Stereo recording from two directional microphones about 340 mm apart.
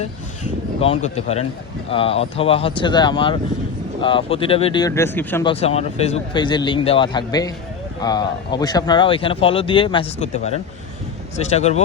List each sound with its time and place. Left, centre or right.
0.8 s speech: centre